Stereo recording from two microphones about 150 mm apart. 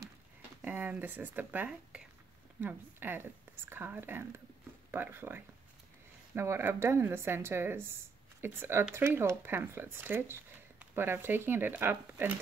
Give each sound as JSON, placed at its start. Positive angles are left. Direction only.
{"t": 0.6, "sound": "speech", "side_deg": -10}